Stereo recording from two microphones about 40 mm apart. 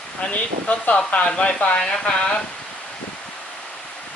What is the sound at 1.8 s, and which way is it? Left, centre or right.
Speech, centre.